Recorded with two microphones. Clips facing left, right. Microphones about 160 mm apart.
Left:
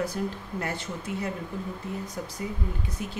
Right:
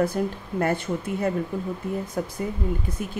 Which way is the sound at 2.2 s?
60° right (ahead or behind).